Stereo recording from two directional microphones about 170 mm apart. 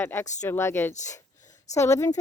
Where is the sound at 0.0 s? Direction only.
15° left (ahead or behind).